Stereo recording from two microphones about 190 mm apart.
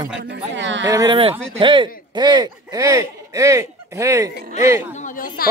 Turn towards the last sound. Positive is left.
turn(degrees=-15)  # may be behind; listen again after turning